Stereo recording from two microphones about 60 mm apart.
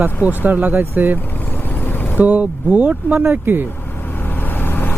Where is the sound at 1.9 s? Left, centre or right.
Left.